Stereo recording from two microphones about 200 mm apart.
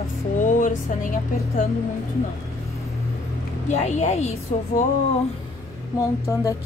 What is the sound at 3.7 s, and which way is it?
Speech, 35° left (ahead or behind).